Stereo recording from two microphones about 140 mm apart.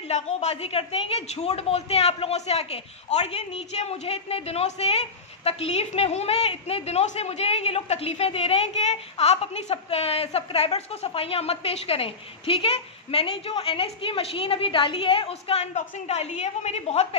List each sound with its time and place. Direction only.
0.1 s a woman's voice: 50° left (ahead or behind)